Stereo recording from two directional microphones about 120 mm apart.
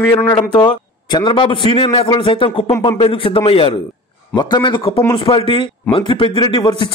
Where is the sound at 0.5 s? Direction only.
40° left (ahead or behind).